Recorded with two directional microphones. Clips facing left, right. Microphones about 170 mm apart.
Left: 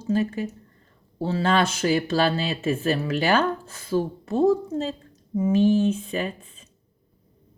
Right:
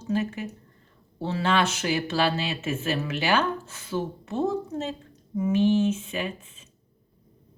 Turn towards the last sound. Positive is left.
turn(degrees=35)  # may be behind; listen again after turning